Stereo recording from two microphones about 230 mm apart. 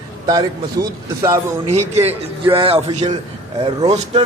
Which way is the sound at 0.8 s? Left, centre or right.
Centre.